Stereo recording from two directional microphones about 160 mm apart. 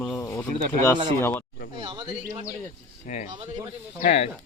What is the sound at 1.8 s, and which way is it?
Speech, 30° right (ahead or behind).